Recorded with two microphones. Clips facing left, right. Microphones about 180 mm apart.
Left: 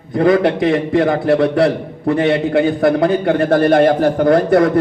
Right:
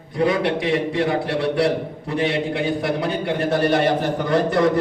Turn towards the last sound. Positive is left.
turn(degrees=55)  # may be behind; listen again after turning